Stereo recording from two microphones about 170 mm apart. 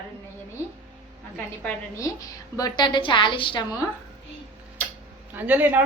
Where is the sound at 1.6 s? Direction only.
10° left (ahead or behind).